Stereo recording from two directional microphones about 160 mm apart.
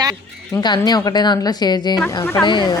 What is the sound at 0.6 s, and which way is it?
Speech, 25° left (ahead or behind).